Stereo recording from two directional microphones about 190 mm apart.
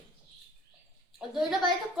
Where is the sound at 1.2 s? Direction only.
Centre (ahead or behind).